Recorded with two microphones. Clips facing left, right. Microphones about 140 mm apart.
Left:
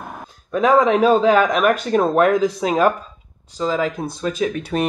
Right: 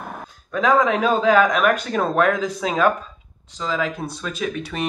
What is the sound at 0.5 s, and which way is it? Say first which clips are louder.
Speech: left 3 dB; 30° left (ahead or behind).